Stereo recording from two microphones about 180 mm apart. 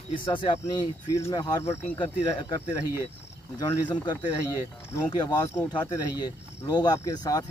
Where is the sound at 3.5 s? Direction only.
25° left (ahead or behind).